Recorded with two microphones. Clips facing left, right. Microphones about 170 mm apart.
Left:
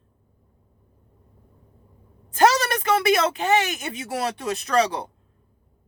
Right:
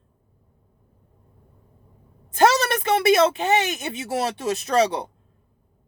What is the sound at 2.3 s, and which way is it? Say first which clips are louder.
Speech: right 1 dB; 25° right (ahead or behind).